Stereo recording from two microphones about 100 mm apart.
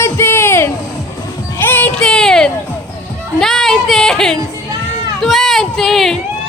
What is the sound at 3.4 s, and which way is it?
Speech, 5° left (ahead or behind).